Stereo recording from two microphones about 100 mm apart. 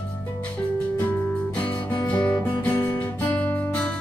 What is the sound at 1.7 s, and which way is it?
Music, 40° left (ahead or behind).